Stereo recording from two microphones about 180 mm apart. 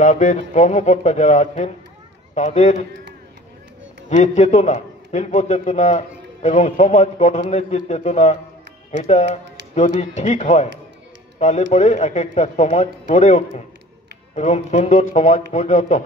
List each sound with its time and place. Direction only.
0.0 s a man's voice: 40° left (ahead or behind)
4.1 s a man's voice: 35° left (ahead or behind)